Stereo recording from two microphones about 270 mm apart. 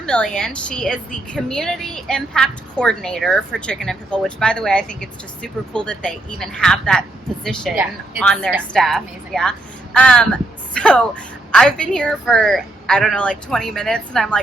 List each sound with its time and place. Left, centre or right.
0.0 s a woman's voice: centre